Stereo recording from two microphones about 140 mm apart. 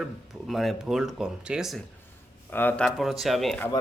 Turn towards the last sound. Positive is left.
turn(degrees=0)  # may be behind; listen again after turning